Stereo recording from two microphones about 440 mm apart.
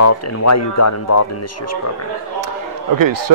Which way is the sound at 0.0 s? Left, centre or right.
Left.